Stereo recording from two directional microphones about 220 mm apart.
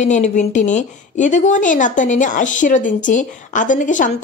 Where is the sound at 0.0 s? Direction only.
35° left (ahead or behind).